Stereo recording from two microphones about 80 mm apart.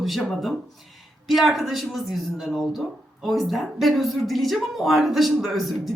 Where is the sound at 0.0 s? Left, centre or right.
Centre.